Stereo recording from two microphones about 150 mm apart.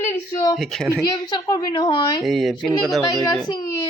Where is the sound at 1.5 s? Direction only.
25° left (ahead or behind).